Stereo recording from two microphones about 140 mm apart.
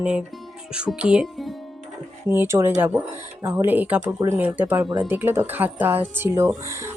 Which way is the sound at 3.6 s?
10° right (ahead or behind).